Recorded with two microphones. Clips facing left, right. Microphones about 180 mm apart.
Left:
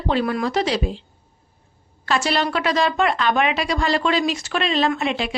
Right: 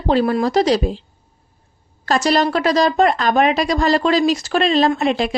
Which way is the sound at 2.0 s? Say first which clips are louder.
Right 5 dB; 40° right (ahead or behind).